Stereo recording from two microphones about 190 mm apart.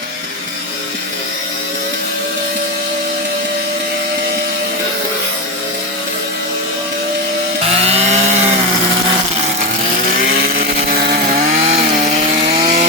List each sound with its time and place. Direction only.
7.7 s chainsaw: 35° right (ahead or behind)
10.3 s chainsaw: 50° right (ahead or behind)
11.6 s chainsaw: 30° right (ahead or behind)